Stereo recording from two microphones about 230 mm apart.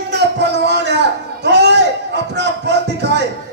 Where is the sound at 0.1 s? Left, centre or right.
Right.